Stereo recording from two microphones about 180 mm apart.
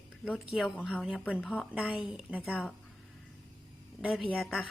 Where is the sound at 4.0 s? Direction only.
Centre (ahead or behind).